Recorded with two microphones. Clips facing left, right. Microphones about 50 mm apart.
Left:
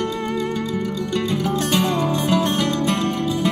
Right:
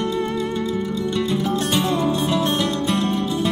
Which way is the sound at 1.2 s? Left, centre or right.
Left.